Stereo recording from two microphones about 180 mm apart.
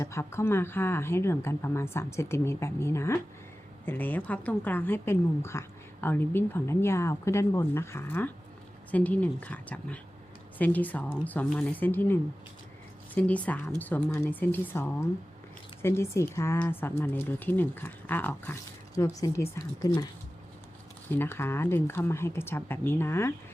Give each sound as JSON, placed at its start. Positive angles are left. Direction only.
{"t": 0.0, "sound": "a woman's voice", "side_deg": 15}
{"t": 21.1, "sound": "a woman's voice", "side_deg": 10}